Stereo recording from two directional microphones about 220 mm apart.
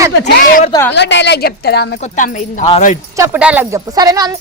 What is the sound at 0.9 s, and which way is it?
A woman's voice, 55° left (ahead or behind).